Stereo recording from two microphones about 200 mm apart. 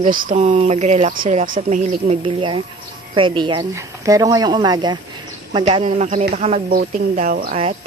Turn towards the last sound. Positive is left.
turn(degrees=-40)  # may be behind; listen again after turning